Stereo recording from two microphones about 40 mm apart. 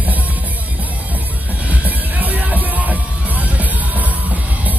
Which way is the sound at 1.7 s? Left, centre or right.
Right.